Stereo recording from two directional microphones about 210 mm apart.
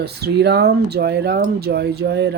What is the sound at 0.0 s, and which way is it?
Speech, 50° right (ahead or behind).